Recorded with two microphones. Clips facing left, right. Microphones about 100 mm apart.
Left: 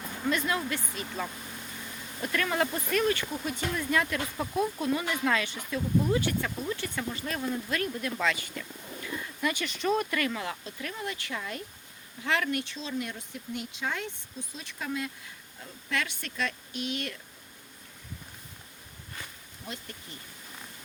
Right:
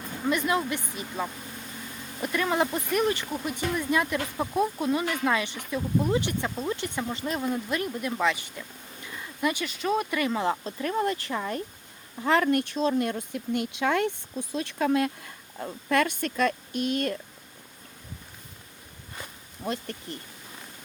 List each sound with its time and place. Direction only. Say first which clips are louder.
0.3 s speech: right 4 dB; 15° right (ahead or behind)
10.2 s speech: right 4 dB; 20° right (ahead or behind)
10.4 s speech: right 9 dB; 35° right (ahead or behind)
19.6 s speech: right 10 dB; 55° right (ahead or behind)